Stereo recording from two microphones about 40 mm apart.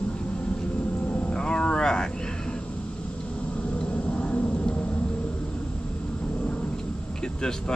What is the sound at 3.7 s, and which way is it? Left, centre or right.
Vehicle, left.